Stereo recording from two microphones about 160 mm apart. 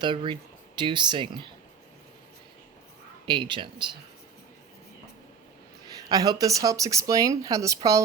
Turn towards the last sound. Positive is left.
turn(degrees=-20)  # may be behind; listen again after turning